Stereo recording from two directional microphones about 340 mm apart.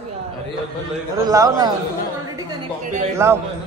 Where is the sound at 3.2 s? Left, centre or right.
Centre.